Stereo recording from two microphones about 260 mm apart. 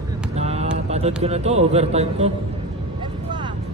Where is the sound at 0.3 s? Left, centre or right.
Right.